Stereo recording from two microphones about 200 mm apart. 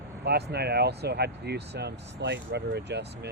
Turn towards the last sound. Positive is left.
turn(degrees=-55)  # may be behind; listen again after turning